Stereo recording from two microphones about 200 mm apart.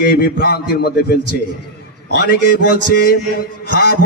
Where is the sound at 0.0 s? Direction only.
50° left (ahead or behind).